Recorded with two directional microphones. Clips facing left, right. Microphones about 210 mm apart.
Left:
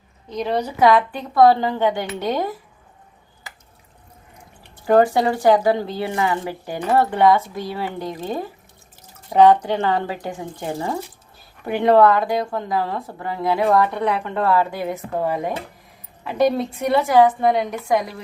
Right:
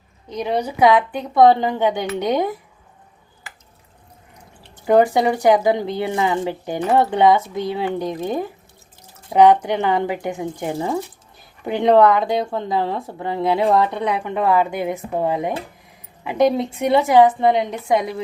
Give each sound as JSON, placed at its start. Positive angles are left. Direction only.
{"t": 0.3, "sound": "speech", "side_deg": -15}
{"t": 4.9, "sound": "a woman's voice", "side_deg": -15}